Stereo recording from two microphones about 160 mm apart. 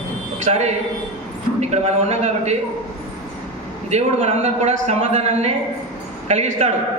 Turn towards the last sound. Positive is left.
turn(degrees=-45)  # may be behind; listen again after turning